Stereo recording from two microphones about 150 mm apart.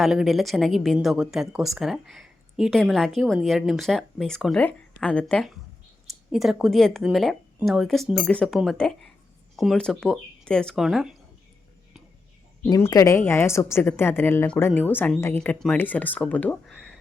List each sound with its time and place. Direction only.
0.0 s a woman's voice: centre (ahead or behind)
12.6 s a woman's voice: 25° left (ahead or behind); by 17.0 s 5° left (ahead or behind)